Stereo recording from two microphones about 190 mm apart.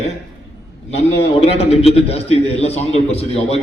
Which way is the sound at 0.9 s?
35° left (ahead or behind).